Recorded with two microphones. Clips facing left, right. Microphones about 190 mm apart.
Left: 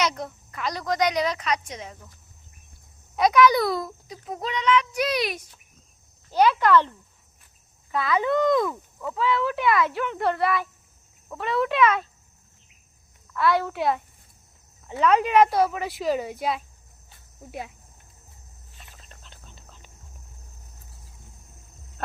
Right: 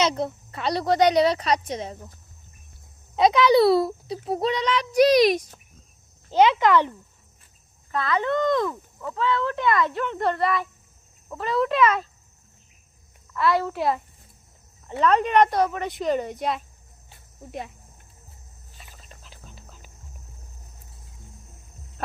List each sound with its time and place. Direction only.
0.0 s a child's voice: 25° right (ahead or behind)
3.2 s a child's voice: 25° right (ahead or behind)
6.3 s speech: 20° right (ahead or behind)
7.9 s speech: 5° left (ahead or behind)
13.3 s speech: centre (ahead or behind)
18.8 s a sound: 5° right (ahead or behind)